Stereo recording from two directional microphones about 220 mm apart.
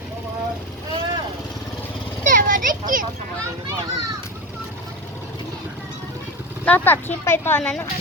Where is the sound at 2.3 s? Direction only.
35° right (ahead or behind).